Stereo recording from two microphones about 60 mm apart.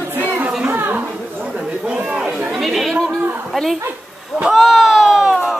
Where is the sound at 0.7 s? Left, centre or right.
Right.